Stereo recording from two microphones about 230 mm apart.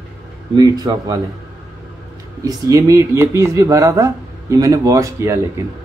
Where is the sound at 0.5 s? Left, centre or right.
Centre.